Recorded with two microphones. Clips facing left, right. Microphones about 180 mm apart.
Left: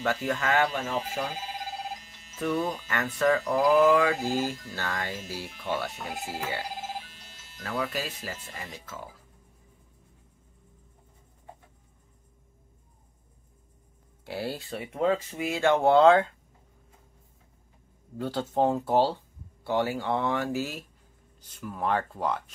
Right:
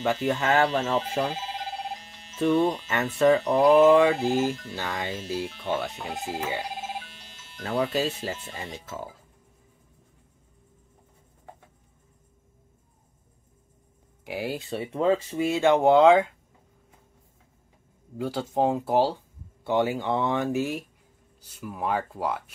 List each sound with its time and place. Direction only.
0.0 s speech: 20° right (ahead or behind)
1.0 s telephone bell ringing: 30° right (ahead or behind)
2.3 s speech: 30° right (ahead or behind)
14.2 s speech: 15° right (ahead or behind)
18.1 s speech: 10° right (ahead or behind)